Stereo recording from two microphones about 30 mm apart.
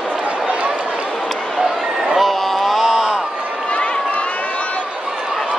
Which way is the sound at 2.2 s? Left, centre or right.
Centre.